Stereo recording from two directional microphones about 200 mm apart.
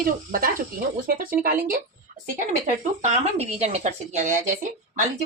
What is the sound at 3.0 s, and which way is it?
Speech, 35° right (ahead or behind).